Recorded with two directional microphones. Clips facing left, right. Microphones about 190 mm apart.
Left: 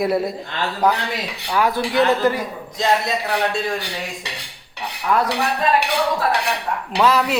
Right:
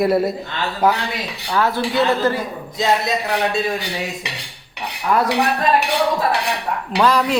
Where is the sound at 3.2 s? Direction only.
Centre (ahead or behind).